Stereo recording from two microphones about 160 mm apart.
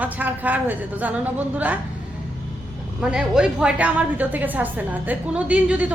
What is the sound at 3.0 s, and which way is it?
A woman's voice, 5° right (ahead or behind).